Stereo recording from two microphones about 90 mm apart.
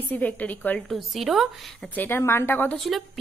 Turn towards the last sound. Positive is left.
turn(degrees=0)  # may be behind; listen again after turning